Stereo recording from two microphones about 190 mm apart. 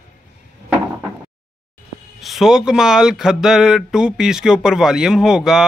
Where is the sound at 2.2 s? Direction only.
Centre (ahead or behind).